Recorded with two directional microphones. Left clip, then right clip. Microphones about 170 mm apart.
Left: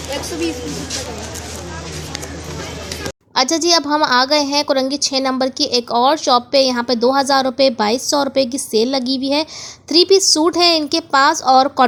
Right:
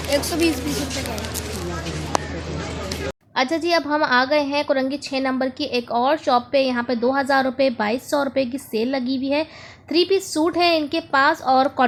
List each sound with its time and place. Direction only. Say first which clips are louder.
3.3 s a woman's voice: left 5 dB; 30° left (ahead or behind)